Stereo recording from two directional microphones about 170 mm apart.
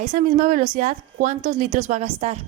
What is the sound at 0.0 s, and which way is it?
Speech, 50° right (ahead or behind).